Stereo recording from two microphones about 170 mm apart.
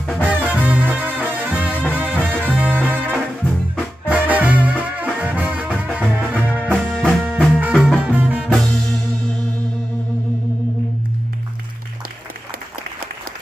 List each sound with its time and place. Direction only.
0.4 s music: 10° right (ahead or behind)
6.5 s music: 5° left (ahead or behind)